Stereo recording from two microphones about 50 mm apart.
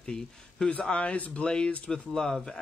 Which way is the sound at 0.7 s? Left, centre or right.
Left.